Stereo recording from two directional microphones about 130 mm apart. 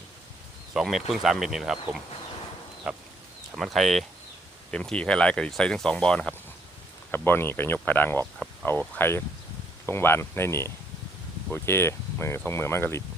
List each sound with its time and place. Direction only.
0.7 s speech: 5° right (ahead or behind)
3.5 s speech: centre (ahead or behind); by 13.0 s 20° left (ahead or behind)